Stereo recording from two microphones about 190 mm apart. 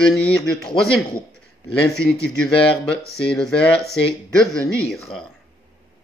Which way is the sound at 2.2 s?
5° left (ahead or behind).